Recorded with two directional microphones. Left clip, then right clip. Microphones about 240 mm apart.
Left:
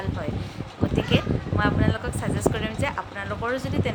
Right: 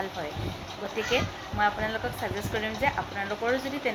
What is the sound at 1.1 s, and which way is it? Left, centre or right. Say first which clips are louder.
Speech: left 3 dB; centre.